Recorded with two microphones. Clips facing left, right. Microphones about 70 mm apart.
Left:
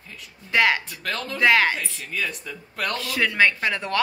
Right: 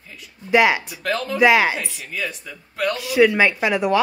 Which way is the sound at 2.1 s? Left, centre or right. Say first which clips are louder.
Even; centre.